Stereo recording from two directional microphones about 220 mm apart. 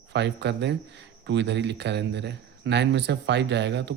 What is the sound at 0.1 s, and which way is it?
Speech, 50° right (ahead or behind).